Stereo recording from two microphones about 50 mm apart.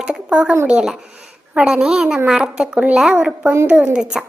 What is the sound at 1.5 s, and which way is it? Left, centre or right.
A woman's voice, centre.